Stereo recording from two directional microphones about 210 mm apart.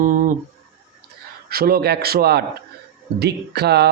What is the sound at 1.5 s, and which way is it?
Mantra, 45° right (ahead or behind).